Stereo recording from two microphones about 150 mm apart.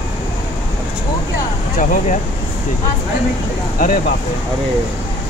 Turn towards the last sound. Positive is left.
turn(degrees=65)  # may be behind; listen again after turning